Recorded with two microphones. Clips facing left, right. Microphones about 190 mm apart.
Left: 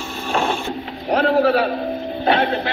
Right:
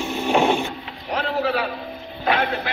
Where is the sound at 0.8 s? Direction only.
40° left (ahead or behind).